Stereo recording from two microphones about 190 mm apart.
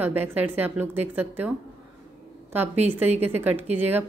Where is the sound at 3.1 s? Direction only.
10° right (ahead or behind).